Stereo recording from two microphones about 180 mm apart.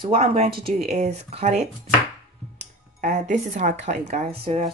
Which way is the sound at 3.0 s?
40° right (ahead or behind).